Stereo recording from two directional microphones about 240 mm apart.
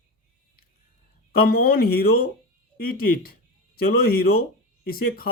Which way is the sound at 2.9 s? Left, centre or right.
Left.